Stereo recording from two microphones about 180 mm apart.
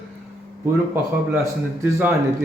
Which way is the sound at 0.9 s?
15° right (ahead or behind).